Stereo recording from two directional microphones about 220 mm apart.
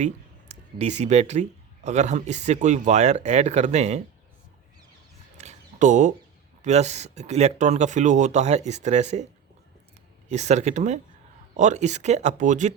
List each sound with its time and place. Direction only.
0.0 s speech: 30° right (ahead or behind)
5.4 s a sound: 35° right (ahead or behind)
6.6 s speech: 30° right (ahead or behind)
10.2 s speech: 30° right (ahead or behind)